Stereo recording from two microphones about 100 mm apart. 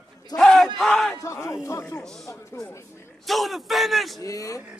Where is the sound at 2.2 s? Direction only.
35° left (ahead or behind).